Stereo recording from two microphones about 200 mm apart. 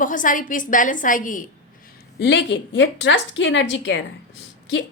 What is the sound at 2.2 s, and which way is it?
A woman's voice, 60° left (ahead or behind).